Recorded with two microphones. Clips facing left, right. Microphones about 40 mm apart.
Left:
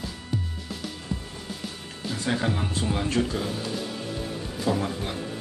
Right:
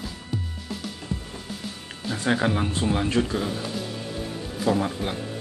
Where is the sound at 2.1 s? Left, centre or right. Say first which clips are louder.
Right 4 dB; centre.